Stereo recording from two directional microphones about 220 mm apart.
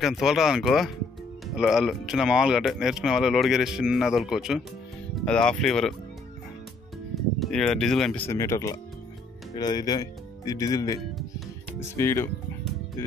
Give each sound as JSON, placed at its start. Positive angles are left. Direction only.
{"t": 0.0, "sound": "speech", "side_deg": 0}
{"t": 7.3, "sound": "speech", "side_deg": 5}
{"t": 12.0, "sound": "speech", "side_deg": 10}